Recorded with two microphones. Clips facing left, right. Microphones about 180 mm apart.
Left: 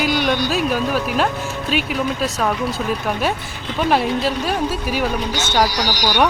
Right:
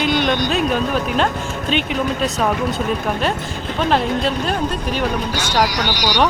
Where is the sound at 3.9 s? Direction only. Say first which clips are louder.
Even; 5° left (ahead or behind).